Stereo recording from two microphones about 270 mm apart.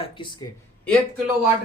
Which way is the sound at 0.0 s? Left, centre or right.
Centre.